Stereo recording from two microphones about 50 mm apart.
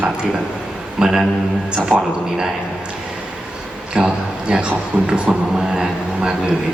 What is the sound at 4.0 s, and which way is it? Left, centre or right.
Speech, centre.